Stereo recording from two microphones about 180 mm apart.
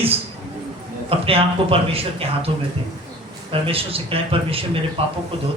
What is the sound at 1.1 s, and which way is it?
A man's voice, 30° right (ahead or behind).